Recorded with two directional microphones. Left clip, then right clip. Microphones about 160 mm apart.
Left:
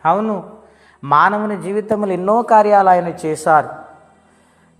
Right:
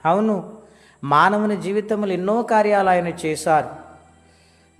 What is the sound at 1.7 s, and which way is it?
A man's voice, centre (ahead or behind).